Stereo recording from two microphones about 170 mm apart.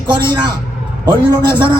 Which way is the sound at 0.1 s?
25° right (ahead or behind).